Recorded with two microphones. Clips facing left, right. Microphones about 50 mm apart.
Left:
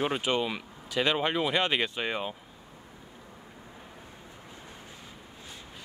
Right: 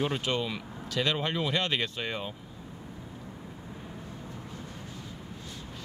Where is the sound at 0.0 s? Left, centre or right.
Centre.